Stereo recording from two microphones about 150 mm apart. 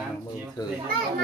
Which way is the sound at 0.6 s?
25° left (ahead or behind).